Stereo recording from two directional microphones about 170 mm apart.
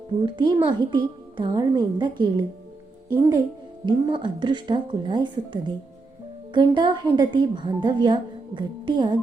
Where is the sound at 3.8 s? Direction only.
30° right (ahead or behind).